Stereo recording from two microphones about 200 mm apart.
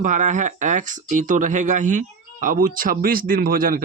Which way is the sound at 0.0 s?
40° right (ahead or behind).